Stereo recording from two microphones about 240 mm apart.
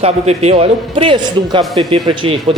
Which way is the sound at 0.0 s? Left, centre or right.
Right.